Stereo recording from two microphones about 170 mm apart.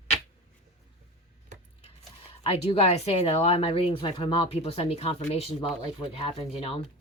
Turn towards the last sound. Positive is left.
turn(degrees=35)  # may be behind; listen again after turning